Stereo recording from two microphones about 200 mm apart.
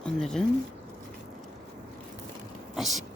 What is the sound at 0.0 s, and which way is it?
Speech, 5° left (ahead or behind).